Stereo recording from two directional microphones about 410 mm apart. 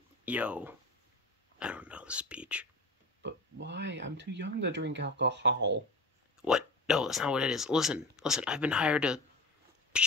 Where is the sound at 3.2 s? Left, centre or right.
Right.